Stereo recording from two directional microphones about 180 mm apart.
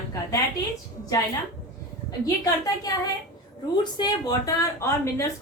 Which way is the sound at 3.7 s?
25° left (ahead or behind).